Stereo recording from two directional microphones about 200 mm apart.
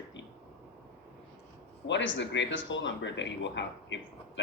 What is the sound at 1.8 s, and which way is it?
Speech, 65° left (ahead or behind).